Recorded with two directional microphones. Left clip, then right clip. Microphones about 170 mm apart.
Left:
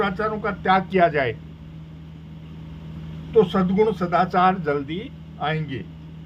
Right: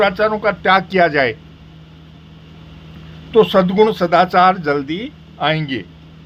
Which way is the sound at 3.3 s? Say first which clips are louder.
Right 7 dB; 25° right (ahead or behind).